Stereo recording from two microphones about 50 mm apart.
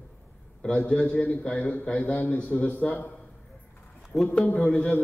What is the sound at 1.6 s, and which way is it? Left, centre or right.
A man's voice, left.